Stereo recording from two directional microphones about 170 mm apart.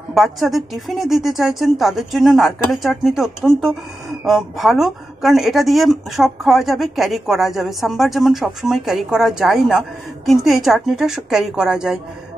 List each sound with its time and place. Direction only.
0.1 s a woman's voice: centre (ahead or behind)